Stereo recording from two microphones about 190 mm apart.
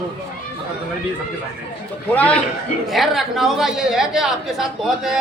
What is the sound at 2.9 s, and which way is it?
A woman's voice, centre (ahead or behind).